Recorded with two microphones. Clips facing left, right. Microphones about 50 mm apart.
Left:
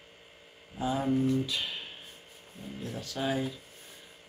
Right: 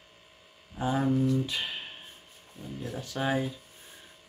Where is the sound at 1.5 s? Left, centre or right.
Right.